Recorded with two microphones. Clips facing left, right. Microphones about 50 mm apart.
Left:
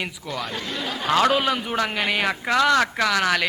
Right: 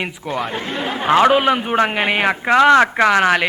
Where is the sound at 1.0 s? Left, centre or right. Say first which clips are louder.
Right 6 dB; right.